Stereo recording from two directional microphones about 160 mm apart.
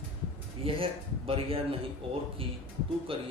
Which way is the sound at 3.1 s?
35° right (ahead or behind).